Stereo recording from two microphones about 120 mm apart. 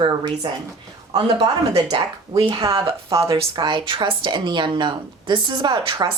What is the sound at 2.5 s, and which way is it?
Speech, 30° right (ahead or behind).